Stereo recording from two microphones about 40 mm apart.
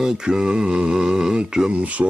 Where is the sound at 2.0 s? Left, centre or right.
Right.